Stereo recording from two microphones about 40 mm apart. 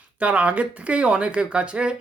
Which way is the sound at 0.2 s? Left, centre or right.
Right.